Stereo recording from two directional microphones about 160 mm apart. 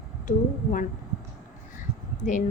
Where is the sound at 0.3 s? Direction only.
50° left (ahead or behind).